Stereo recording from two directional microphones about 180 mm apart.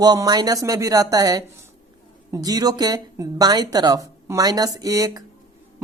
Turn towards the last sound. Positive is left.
turn(degrees=-20)  # may be behind; listen again after turning